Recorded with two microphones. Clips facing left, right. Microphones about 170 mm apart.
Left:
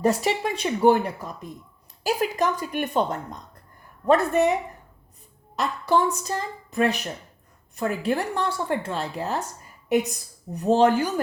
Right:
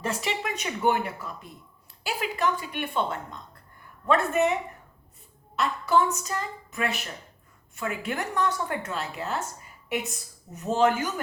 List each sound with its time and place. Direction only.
0.0 s speech: 40° left (ahead or behind)
5.5 s speech: 35° left (ahead or behind)
10.5 s speech: 35° left (ahead or behind)